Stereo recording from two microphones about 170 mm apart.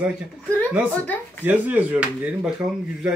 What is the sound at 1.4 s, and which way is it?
Speech, 10° right (ahead or behind).